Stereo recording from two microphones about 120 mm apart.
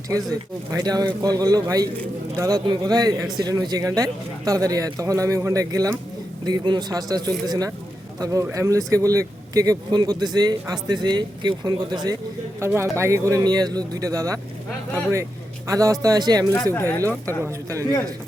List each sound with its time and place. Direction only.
0.7 s a man's voice: 35° right (ahead or behind)
12.5 s speech: 20° right (ahead or behind)